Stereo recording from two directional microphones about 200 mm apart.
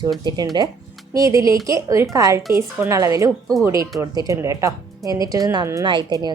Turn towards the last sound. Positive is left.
turn(degrees=-20)  # may be behind; listen again after turning